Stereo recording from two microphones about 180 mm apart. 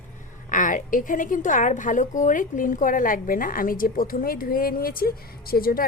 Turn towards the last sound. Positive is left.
turn(degrees=55)  # may be behind; listen again after turning